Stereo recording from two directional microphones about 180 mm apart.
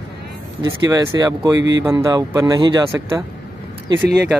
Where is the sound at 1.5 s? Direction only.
90° right.